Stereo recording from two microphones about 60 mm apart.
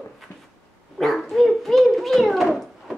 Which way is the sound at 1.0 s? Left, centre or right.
Centre.